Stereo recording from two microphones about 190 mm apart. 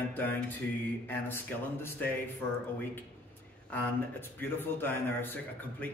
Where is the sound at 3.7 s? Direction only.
10° left (ahead or behind).